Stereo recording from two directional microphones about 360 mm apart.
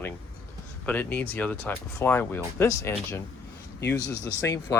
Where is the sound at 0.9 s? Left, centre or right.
Centre.